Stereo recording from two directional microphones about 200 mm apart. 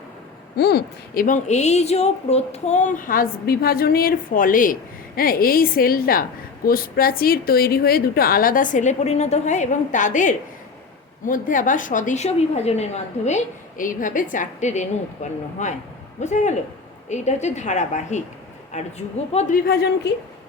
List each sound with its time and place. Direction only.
0.5 s a woman's voice: 55° left (ahead or behind)